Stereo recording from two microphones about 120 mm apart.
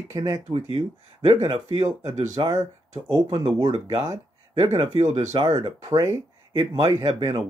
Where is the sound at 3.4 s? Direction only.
45° right (ahead or behind).